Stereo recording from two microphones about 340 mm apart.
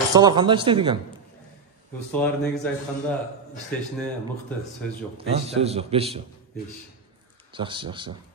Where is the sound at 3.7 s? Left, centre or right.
Centre.